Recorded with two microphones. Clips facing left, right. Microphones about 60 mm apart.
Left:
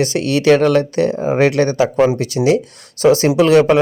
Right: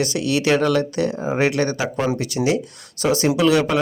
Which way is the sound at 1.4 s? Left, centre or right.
Left.